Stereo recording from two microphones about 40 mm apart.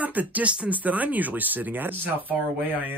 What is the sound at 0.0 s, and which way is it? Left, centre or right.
Speech, right.